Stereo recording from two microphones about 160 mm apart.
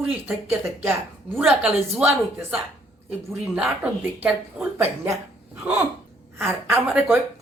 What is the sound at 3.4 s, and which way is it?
Speech, 5° right (ahead or behind).